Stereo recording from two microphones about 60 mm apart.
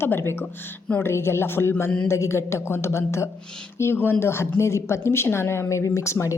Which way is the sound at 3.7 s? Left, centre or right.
Left.